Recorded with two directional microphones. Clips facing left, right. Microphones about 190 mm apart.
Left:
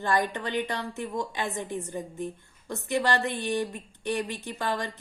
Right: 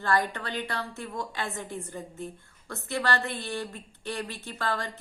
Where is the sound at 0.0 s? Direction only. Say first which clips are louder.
Left 1 dB; 20° left (ahead or behind).